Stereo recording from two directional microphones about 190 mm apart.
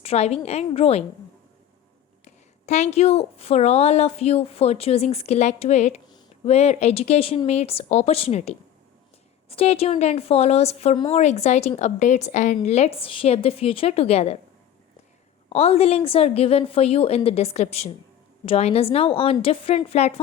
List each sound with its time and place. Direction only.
0.0 s a woman's voice: 35° left (ahead or behind)
2.2 s a woman's voice: 35° left (ahead or behind)
15.4 s a woman's voice: 35° left (ahead or behind)